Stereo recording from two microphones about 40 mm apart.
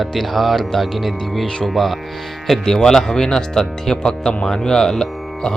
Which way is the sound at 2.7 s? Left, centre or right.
Centre.